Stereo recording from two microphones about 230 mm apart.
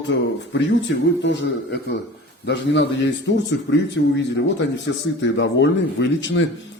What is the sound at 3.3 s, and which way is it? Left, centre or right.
Speech, left.